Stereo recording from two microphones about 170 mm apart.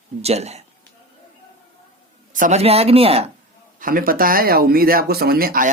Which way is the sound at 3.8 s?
55° right (ahead or behind).